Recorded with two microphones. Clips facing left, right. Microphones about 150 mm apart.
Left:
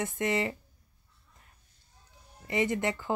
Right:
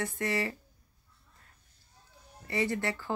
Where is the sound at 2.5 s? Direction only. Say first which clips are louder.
Left 2 dB; 20° left (ahead or behind).